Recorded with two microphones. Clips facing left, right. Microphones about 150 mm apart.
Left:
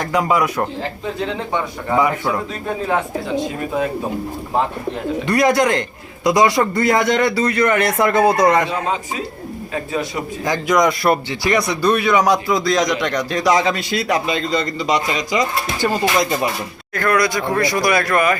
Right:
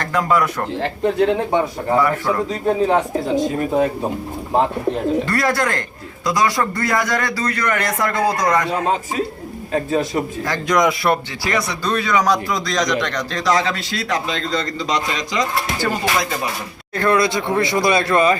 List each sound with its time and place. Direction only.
0.0 s speech: 10° left (ahead or behind)
0.8 s speech: 55° right (ahead or behind)
2.0 s speech: 15° left (ahead or behind)
2.5 s speech: 20° right (ahead or behind)
3.3 s speech: 40° right (ahead or behind)
5.2 s a man's voice: 20° left (ahead or behind)
9.7 s speech: 45° right (ahead or behind)
10.7 s a man's voice: centre (ahead or behind)
11.4 s speech: 15° left (ahead or behind)
16.9 s speech: 25° right (ahead or behind)